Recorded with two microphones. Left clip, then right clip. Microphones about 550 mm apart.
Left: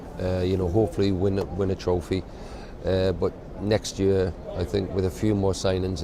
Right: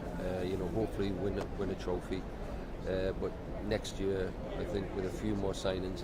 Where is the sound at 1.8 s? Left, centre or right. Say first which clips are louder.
Left 11 dB; left.